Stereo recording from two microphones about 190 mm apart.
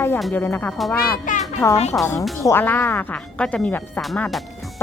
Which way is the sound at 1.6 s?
15° left (ahead or behind).